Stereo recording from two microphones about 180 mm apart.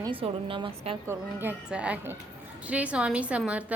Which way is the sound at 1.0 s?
10° right (ahead or behind).